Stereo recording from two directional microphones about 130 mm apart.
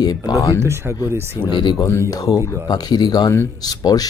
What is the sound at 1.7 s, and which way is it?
Speech, 20° left (ahead or behind).